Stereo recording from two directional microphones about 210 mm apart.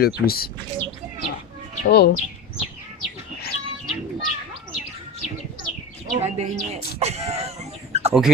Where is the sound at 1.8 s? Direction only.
50° left (ahead or behind).